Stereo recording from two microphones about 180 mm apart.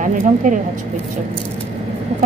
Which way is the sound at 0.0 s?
45° right (ahead or behind).